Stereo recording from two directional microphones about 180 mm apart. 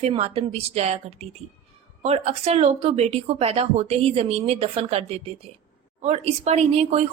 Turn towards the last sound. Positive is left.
turn(degrees=-35)  # may be behind; listen again after turning